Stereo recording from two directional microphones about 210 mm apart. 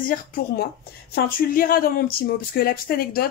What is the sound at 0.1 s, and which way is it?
Speech, 45° left (ahead or behind).